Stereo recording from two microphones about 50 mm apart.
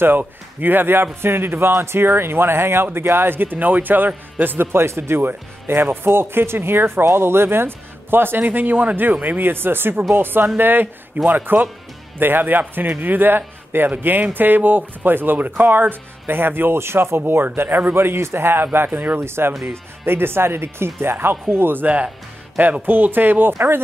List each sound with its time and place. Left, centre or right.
0.0 s speech: right
17.2 s speech: right
19.1 s speech: right